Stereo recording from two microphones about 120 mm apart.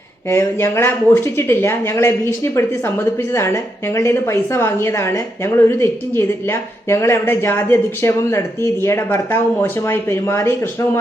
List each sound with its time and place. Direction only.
0.3 s speech: 25° left (ahead or behind)